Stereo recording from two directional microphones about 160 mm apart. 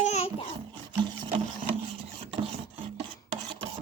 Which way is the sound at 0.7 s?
30° right (ahead or behind).